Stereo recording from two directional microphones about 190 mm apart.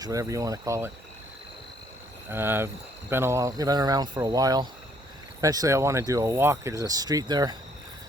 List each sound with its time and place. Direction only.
0.0 s speech: 15° right (ahead or behind)
2.3 s speech: 10° right (ahead or behind)